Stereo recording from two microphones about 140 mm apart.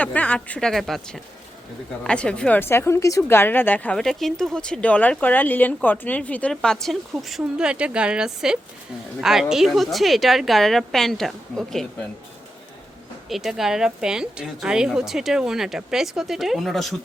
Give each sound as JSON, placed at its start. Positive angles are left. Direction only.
{"t": 0.0, "sound": "a woman's voice", "side_deg": 10}
{"t": 13.2, "sound": "a woman's voice", "side_deg": 0}